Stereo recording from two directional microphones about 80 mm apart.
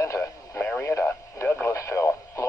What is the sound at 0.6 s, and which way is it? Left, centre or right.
Speech, left.